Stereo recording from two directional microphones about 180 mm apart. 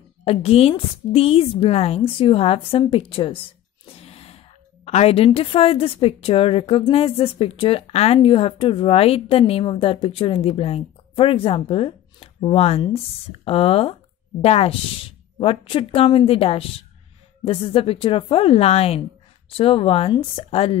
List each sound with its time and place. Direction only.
0.2 s a woman's voice: 35° left (ahead or behind)
3.8 s a sound: 30° left (ahead or behind)
4.8 s a woman's voice: 35° left (ahead or behind)